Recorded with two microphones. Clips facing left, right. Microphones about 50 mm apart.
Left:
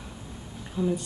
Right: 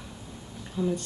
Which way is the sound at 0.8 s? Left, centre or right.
Centre.